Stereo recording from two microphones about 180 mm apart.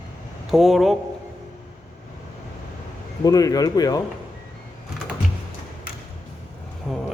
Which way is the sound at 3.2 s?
20° left (ahead or behind).